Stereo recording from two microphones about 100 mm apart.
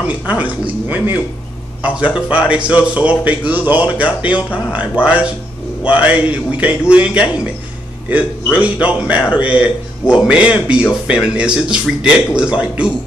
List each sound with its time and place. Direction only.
0.0 s a man's voice: 15° right (ahead or behind)